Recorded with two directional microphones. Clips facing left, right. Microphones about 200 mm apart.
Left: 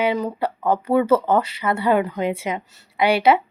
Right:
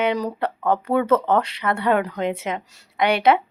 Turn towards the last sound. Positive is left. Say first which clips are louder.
# left 1 dB
turn(degrees=5)  # may be behind; listen again after turning